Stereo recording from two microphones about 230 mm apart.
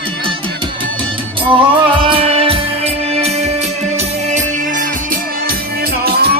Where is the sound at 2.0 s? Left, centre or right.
Right.